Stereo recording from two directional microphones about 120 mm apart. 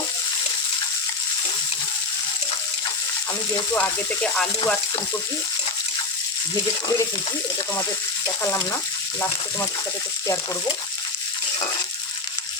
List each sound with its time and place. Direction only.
3.8 s speech: 10° left (ahead or behind)
6.5 s speech: 30° left (ahead or behind)